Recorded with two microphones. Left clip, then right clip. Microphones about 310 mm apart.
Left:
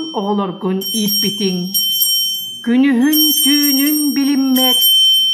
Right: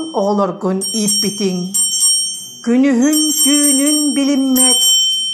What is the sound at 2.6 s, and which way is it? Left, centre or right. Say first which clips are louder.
Music: right 1 dB; centre.